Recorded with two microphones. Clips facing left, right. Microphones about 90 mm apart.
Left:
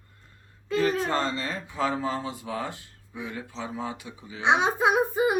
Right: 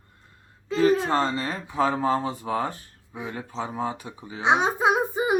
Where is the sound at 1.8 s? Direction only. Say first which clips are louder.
Right 5 dB; 35° right (ahead or behind).